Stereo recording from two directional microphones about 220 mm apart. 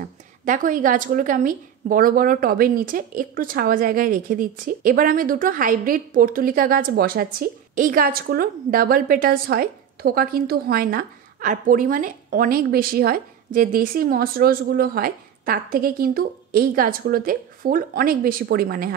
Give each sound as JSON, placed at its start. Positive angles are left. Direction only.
{"t": 0.0, "sound": "a woman's voice", "side_deg": -35}